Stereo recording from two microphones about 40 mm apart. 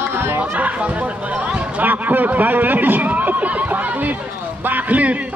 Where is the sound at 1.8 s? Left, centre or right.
Right.